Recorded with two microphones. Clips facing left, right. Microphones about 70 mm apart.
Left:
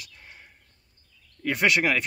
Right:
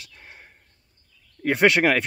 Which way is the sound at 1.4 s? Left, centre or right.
Right.